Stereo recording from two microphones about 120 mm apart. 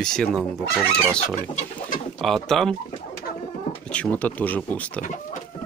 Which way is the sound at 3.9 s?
10° left (ahead or behind).